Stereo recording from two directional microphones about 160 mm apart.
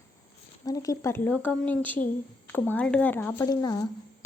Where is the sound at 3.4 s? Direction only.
25° left (ahead or behind).